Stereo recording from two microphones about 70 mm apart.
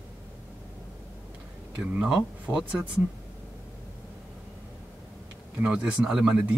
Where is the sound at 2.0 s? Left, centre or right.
Centre.